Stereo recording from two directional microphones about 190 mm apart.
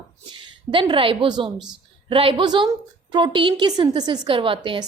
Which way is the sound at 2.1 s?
30° right (ahead or behind).